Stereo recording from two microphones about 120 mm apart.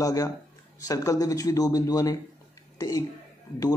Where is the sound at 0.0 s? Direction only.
30° left (ahead or behind).